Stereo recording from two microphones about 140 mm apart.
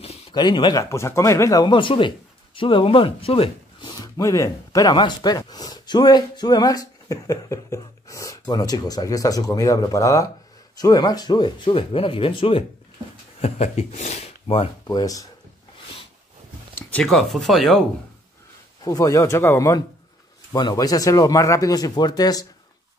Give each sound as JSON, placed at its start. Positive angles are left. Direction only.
{"t": 0.3, "sound": "speech", "side_deg": 30}
{"t": 3.9, "sound": "speech", "side_deg": 25}
{"t": 13.4, "sound": "speech", "side_deg": 55}
{"t": 14.9, "sound": "speech", "side_deg": 25}
{"t": 16.9, "sound": "speech", "side_deg": 5}
{"t": 18.9, "sound": "speech", "side_deg": 25}